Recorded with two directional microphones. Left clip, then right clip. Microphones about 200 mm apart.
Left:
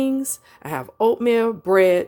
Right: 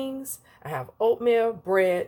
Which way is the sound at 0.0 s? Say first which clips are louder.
Left 10 dB; 40° left (ahead or behind).